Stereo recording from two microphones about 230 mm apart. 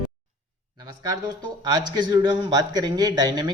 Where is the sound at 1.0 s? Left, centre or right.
Centre.